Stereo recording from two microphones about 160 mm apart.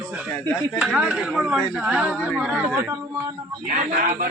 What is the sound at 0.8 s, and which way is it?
Speech, 5° right (ahead or behind).